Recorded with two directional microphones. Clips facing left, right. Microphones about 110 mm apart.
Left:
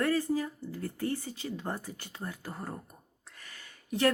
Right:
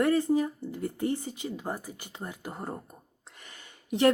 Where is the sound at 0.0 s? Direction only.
20° right (ahead or behind).